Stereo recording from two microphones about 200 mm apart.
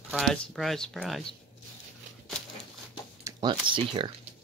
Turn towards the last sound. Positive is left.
turn(degrees=-25)  # may be behind; listen again after turning